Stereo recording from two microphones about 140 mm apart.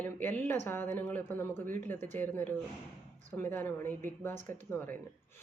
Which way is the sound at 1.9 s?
55° right (ahead or behind).